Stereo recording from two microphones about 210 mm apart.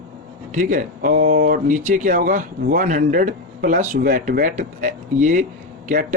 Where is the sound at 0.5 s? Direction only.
40° right (ahead or behind).